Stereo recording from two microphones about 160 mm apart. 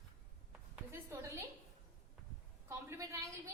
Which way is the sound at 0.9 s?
15° right (ahead or behind).